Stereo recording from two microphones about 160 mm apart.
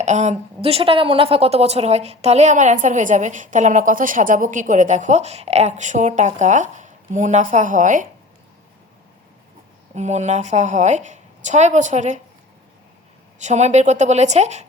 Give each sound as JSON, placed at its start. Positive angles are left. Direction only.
{"t": 0.0, "sound": "a woman's voice", "side_deg": -50}
{"t": 9.9, "sound": "a woman's voice", "side_deg": -45}
{"t": 13.4, "sound": "a woman's voice", "side_deg": -45}